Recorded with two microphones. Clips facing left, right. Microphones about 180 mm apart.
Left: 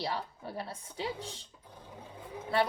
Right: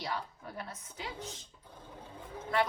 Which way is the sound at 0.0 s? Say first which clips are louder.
Left 3 dB; 30° left (ahead or behind).